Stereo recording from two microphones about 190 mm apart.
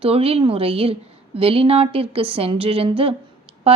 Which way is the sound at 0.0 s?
30° right (ahead or behind).